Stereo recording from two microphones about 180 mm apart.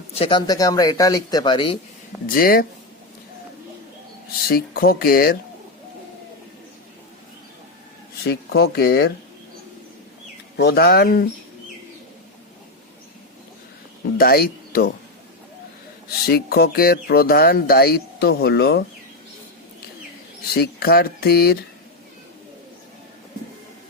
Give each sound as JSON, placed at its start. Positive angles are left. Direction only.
{"t": 0.1, "sound": "speech", "side_deg": 30}
{"t": 2.2, "sound": "speech", "side_deg": 55}
{"t": 4.4, "sound": "speech", "side_deg": 55}
{"t": 8.2, "sound": "speech", "side_deg": 60}
{"t": 10.6, "sound": "speech", "side_deg": 65}
{"t": 14.2, "sound": "speech", "side_deg": 55}
{"t": 16.2, "sound": "speech", "side_deg": 60}
{"t": 20.5, "sound": "speech", "side_deg": 60}